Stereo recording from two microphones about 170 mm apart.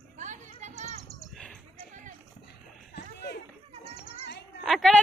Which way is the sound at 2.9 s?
75° left (ahead or behind).